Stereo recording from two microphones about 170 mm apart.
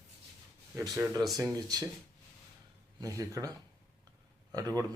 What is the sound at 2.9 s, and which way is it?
Speech, 20° right (ahead or behind).